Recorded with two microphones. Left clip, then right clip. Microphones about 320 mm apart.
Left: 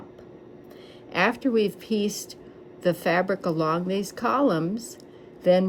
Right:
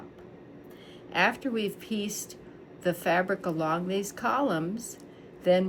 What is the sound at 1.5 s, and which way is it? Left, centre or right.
A woman's voice, centre.